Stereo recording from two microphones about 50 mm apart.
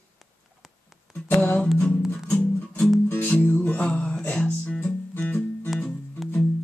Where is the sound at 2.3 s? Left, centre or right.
Centre.